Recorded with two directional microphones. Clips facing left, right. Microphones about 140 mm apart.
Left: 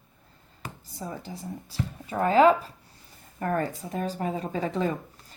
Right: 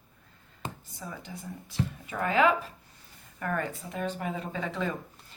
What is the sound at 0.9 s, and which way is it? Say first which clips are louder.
Speech: left 4 dB; 35° left (ahead or behind).